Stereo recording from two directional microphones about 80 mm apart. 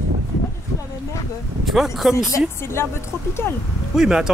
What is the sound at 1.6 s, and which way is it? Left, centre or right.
Speech, centre.